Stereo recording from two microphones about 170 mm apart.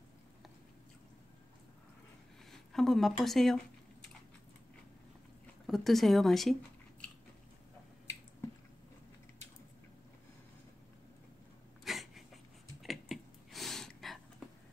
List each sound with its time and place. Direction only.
2.5 s speech: centre (ahead or behind)
5.7 s speech: centre (ahead or behind)
11.8 s a sound: centre (ahead or behind)